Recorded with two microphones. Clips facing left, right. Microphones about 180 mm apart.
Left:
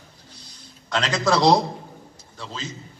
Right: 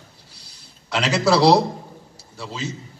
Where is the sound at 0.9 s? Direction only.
10° right (ahead or behind).